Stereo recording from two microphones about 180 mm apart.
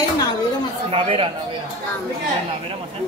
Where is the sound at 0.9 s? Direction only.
30° right (ahead or behind).